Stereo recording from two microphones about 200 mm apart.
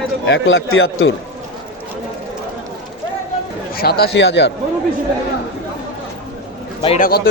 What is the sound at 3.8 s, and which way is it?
Speech, 50° left (ahead or behind).